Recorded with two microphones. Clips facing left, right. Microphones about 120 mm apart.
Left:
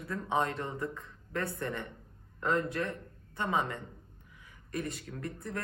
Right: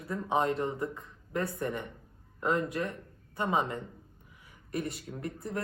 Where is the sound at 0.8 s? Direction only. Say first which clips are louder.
Right 2 dB; 15° right (ahead or behind).